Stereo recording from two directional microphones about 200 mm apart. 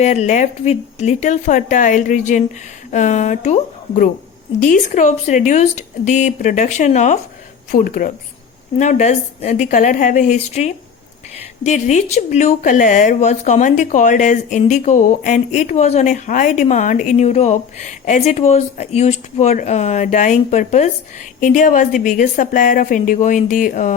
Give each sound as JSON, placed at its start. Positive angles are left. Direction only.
{"t": 0.0, "sound": "a woman's voice", "side_deg": 35}